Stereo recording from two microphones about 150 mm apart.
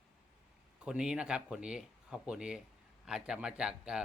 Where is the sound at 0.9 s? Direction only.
5° right (ahead or behind).